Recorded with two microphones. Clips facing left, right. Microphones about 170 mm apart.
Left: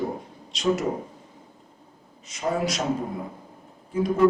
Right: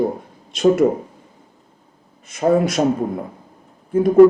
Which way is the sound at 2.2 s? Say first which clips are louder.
Right 10 dB; 55° right (ahead or behind).